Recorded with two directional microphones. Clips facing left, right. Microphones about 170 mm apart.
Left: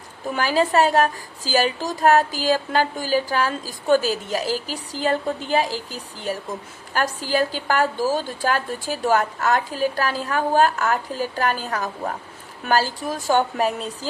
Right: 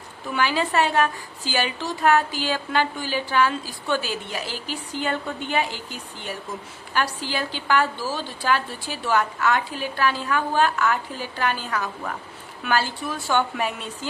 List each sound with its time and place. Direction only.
0.3 s a woman's voice: 40° left (ahead or behind)